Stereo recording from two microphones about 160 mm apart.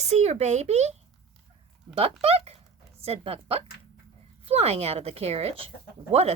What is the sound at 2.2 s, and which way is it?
A woman's voice, 40° right (ahead or behind).